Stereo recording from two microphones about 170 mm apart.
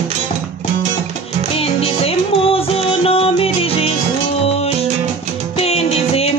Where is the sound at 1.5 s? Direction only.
35° left (ahead or behind).